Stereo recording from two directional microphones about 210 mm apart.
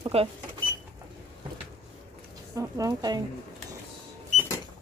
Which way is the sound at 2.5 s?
15° right (ahead or behind).